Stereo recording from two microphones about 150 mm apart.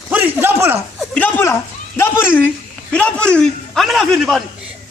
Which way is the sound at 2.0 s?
15° left (ahead or behind).